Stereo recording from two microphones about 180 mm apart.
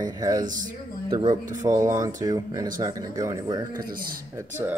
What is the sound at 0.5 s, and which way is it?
Speech, 45° right (ahead or behind).